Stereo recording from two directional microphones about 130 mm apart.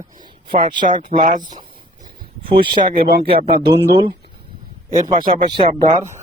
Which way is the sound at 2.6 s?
35° right (ahead or behind).